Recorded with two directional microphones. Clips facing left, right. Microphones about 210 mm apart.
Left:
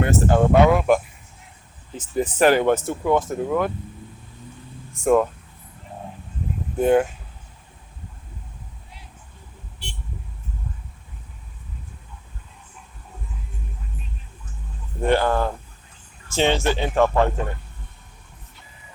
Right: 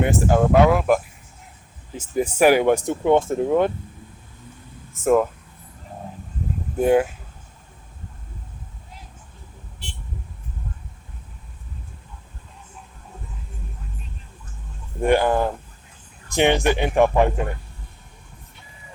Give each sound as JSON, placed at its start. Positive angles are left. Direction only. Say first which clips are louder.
{"t": 0.0, "sound": "speech", "louder": "even", "side_deg": -15}
{"t": 5.0, "sound": "speech", "louder": "even", "side_deg": -5}
{"t": 6.7, "sound": "speech", "louder": "even", "side_deg": -10}
{"t": 15.0, "sound": "speech", "louder": "right 2 dB", "side_deg": -15}